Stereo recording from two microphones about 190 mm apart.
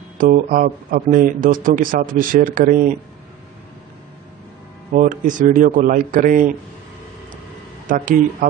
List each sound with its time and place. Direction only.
0.2 s speech: 45° right (ahead or behind)
4.9 s speech: 45° right (ahead or behind)
7.9 s speech: 45° right (ahead or behind)